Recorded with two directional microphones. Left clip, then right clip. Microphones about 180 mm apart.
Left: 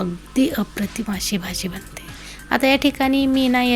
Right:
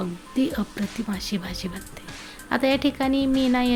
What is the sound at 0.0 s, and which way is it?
Speech, 15° left (ahead or behind).